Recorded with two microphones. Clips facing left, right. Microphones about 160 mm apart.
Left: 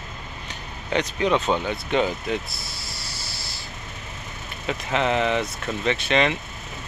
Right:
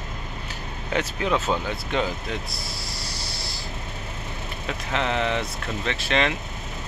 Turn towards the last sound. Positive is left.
turn(degrees=0)  # may be behind; listen again after turning